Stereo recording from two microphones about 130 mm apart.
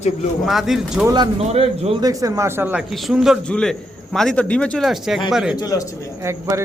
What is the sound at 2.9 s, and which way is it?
A man's voice, 5° right (ahead or behind).